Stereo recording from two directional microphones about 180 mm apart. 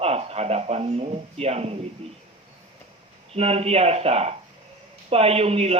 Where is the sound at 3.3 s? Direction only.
35° right (ahead or behind).